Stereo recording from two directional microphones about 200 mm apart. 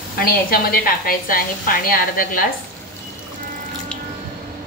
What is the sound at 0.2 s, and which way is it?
A woman's voice, 45° left (ahead or behind).